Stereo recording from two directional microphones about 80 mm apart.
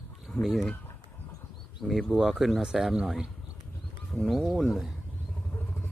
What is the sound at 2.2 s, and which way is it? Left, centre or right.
Speech, centre.